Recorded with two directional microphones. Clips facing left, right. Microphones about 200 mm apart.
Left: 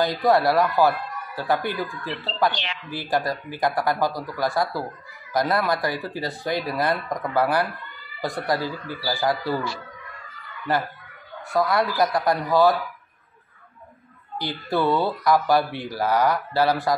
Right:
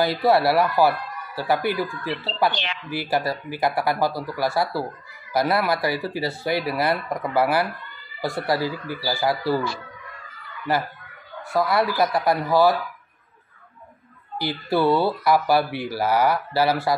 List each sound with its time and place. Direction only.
0.0 s speech: 5° right (ahead or behind)
11.5 s speech: 5° right (ahead or behind)
14.4 s speech: 5° right (ahead or behind)